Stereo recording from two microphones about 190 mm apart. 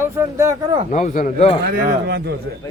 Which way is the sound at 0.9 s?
40° left (ahead or behind).